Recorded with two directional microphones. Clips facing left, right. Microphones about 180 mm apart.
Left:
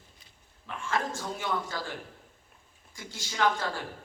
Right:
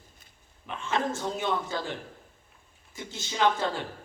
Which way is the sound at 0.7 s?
25° right (ahead or behind).